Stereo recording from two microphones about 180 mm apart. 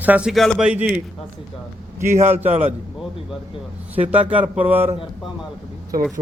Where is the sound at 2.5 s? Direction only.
35° right (ahead or behind).